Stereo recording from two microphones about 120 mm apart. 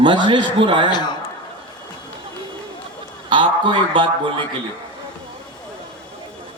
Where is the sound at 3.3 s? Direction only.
45° right (ahead or behind).